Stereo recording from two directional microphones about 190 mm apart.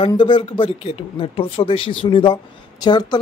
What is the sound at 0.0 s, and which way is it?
Speech, 25° left (ahead or behind).